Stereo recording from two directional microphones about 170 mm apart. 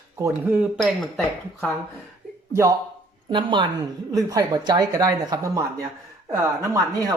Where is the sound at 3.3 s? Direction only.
30° right (ahead or behind).